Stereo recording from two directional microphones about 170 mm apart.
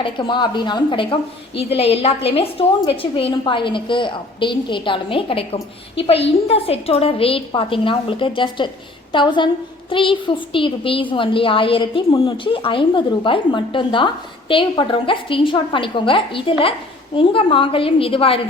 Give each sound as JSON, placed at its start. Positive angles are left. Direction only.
{"t": 0.0, "sound": "a woman's voice", "side_deg": 30}